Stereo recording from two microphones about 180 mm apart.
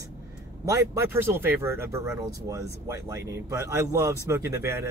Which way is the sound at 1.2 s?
10° right (ahead or behind).